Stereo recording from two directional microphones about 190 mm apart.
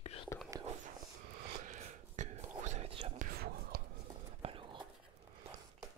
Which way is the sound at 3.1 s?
50° right (ahead or behind).